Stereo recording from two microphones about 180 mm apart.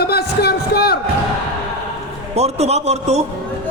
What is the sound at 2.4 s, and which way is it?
Speech, 35° right (ahead or behind).